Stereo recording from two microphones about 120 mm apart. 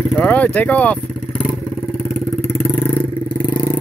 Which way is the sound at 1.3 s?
45° left (ahead or behind).